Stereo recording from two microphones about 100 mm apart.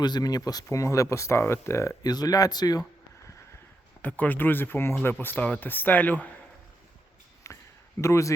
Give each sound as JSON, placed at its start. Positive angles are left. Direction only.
{"t": 0.0, "sound": "speech", "side_deg": 45}
{"t": 4.0, "sound": "a man's voice", "side_deg": 15}
{"t": 7.4, "sound": "a sound", "side_deg": 30}